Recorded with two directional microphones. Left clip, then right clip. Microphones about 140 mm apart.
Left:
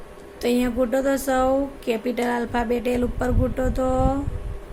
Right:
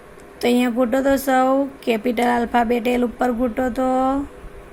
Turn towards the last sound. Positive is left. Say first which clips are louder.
# right 3 dB
turn(degrees=-35)  # may be behind; listen again after turning